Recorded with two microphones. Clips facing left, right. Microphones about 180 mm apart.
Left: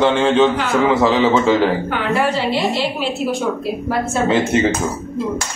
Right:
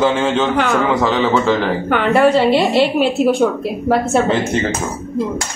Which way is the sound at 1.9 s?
60° right (ahead or behind).